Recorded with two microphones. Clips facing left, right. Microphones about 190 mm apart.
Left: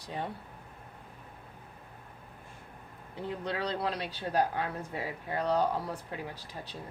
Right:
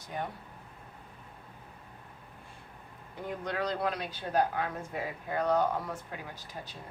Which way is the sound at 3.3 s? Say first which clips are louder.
Right 1 dB; 30° left (ahead or behind).